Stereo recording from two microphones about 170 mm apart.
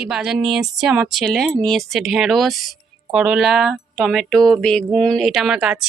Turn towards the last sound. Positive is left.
turn(degrees=-5)  # may be behind; listen again after turning